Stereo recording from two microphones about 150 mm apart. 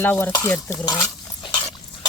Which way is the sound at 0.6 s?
25° left (ahead or behind).